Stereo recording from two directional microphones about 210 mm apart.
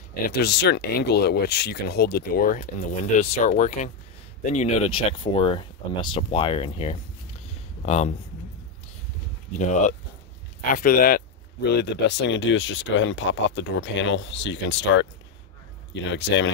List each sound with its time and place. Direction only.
0.3 s speech: 50° left (ahead or behind); by 8.1 s 30° left (ahead or behind)
9.6 s speech: 35° left (ahead or behind)
11.7 s speech: 55° left (ahead or behind)